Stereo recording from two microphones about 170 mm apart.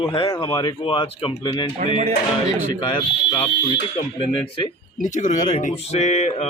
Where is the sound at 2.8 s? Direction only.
30° left (ahead or behind).